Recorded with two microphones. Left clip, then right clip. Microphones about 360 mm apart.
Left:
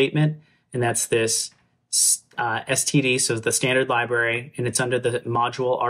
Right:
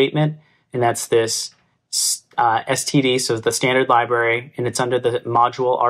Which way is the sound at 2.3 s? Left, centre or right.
Centre.